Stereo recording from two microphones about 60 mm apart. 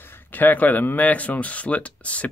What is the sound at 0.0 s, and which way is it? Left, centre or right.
Speech, left.